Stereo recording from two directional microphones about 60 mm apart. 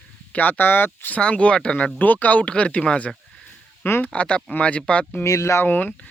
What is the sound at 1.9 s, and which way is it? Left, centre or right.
Speech, left.